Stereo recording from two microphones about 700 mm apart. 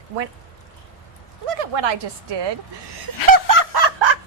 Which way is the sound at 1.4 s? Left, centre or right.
Right.